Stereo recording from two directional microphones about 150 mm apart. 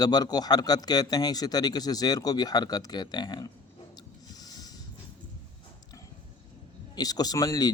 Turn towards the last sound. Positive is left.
turn(degrees=25)  # may be behind; listen again after turning